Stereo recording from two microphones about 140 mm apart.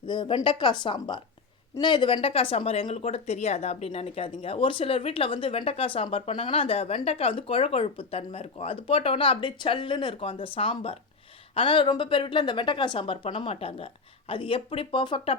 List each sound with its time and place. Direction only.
0.0 s speech: 35° left (ahead or behind)